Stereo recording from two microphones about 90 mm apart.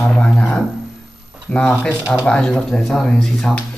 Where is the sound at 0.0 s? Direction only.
10° left (ahead or behind).